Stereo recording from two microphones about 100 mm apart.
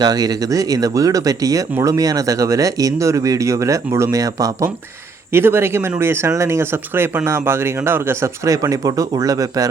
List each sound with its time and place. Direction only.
0.0 s speech: 40° right (ahead or behind)
5.3 s speech: 25° right (ahead or behind)